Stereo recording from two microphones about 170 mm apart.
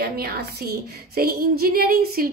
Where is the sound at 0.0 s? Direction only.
65° right (ahead or behind).